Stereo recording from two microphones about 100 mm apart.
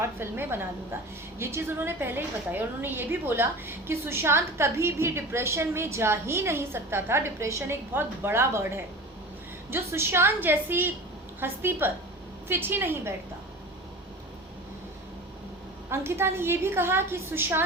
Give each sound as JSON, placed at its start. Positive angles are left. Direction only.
{"t": 0.0, "sound": "a woman's voice", "side_deg": -25}
{"t": 15.9, "sound": "a woman's voice", "side_deg": -25}